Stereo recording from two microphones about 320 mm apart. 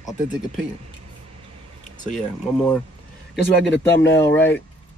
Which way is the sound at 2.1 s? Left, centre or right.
Centre.